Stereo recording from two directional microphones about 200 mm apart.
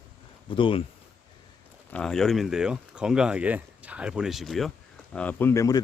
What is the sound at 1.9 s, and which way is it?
Speech, 5° left (ahead or behind).